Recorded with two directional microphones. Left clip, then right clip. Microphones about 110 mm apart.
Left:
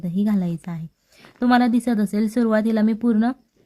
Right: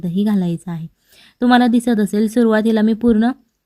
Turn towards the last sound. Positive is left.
turn(degrees=-30)  # may be behind; listen again after turning